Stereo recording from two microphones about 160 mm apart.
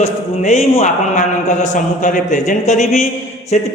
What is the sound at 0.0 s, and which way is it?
A man's voice, 40° left (ahead or behind).